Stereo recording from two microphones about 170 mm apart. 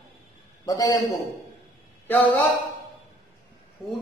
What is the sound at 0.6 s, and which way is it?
Speech, 20° left (ahead or behind).